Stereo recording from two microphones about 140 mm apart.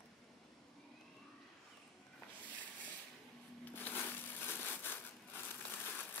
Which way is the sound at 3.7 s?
15° left (ahead or behind).